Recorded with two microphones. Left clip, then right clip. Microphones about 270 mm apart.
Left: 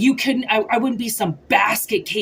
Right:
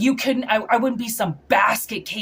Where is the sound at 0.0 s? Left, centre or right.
Centre.